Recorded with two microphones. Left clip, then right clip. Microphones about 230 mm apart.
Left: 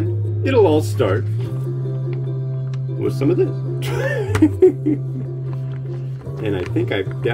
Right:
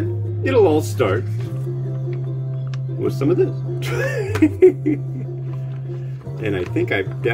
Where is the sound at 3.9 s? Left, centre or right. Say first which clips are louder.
Left 1 dB; centre.